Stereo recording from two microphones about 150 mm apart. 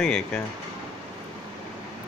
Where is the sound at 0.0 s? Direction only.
5° left (ahead or behind).